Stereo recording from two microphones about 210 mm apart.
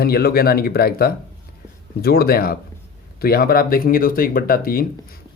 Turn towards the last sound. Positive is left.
turn(degrees=45)  # may be behind; listen again after turning